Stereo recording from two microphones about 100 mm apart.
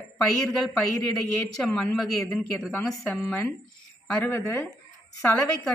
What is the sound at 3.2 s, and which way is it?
Speech, 25° left (ahead or behind).